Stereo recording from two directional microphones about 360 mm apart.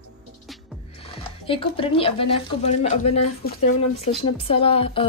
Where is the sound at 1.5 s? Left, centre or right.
Centre.